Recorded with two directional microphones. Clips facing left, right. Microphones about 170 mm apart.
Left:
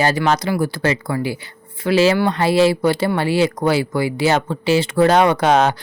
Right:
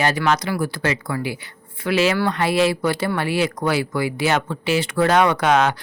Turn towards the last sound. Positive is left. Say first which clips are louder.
# left 3 dB
turn(degrees=30)  # may be behind; listen again after turning